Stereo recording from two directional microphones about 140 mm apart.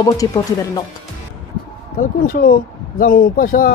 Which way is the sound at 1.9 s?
85° left.